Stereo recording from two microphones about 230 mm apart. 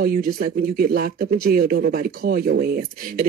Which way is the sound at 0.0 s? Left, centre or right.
Right.